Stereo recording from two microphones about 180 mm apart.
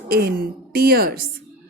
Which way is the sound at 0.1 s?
55° right (ahead or behind).